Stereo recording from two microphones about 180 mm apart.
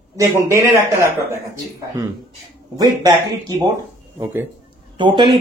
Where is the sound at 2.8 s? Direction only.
20° right (ahead or behind).